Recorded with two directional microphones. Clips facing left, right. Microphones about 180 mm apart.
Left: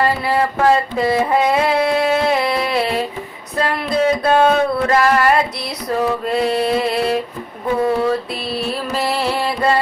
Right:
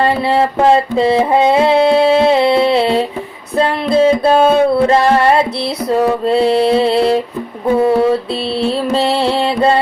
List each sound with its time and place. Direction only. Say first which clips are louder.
0.0 s music: right 4 dB; 25° right (ahead or behind)